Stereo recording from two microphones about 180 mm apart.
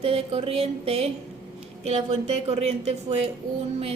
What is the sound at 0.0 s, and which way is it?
A woman's voice, 30° right (ahead or behind).